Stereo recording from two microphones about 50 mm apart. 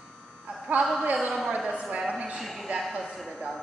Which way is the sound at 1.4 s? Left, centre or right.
Centre.